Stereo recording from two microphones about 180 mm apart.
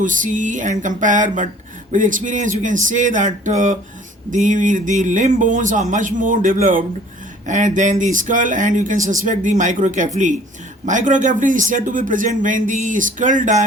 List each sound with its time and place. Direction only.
0.0 s speech: 45° right (ahead or behind)